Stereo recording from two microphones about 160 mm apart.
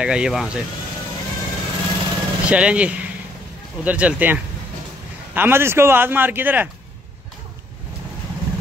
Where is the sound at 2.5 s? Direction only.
5° right (ahead or behind).